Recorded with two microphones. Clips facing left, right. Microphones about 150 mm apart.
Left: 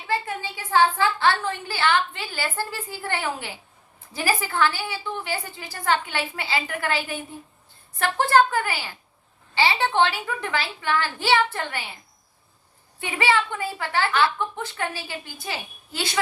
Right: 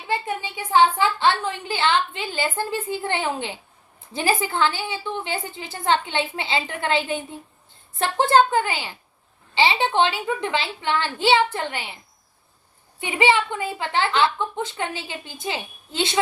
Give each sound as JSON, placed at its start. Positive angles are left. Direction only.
{"t": 0.1, "sound": "a woman's voice", "side_deg": -20}
{"t": 13.0, "sound": "a woman's voice", "side_deg": -20}